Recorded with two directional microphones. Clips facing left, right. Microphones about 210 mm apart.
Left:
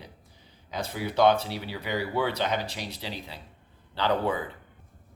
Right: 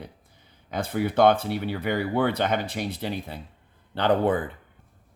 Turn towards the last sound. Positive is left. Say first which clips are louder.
# right 5 dB
turn(degrees=-50)  # may be behind; listen again after turning